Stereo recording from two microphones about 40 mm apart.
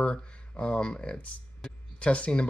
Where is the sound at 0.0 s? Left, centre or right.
Left.